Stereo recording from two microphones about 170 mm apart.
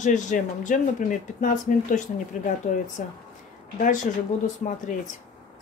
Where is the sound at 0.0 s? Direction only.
45° left (ahead or behind).